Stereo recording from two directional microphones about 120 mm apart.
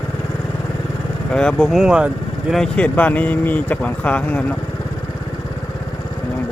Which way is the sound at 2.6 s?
10° left (ahead or behind).